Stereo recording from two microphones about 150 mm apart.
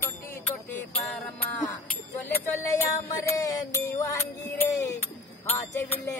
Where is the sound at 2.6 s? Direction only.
20° left (ahead or behind).